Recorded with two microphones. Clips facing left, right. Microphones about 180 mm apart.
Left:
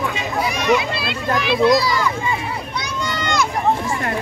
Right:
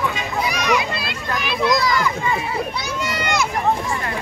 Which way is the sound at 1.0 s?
25° left (ahead or behind).